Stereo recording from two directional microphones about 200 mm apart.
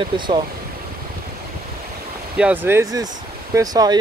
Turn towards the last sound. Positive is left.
turn(degrees=-20)  # may be behind; listen again after turning